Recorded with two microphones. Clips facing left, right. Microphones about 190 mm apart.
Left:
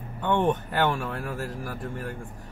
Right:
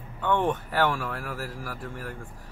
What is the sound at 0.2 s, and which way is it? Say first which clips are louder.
Speech: left 2 dB; 20° left (ahead or behind).